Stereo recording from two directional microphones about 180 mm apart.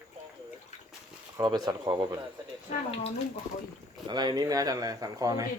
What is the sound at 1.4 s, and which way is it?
Speech, 20° right (ahead or behind).